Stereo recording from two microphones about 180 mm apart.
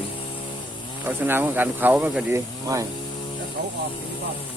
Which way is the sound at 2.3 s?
20° right (ahead or behind).